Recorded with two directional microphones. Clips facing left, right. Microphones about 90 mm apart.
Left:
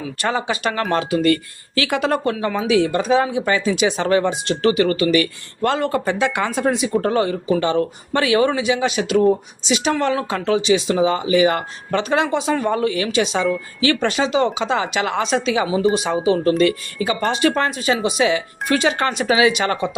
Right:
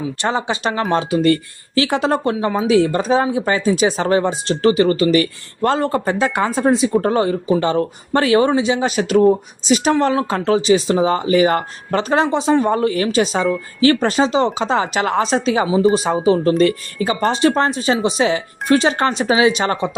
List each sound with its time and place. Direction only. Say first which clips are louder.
0.2 s speech: even; 25° right (ahead or behind)
2.6 s speech: right 3 dB; 35° right (ahead or behind)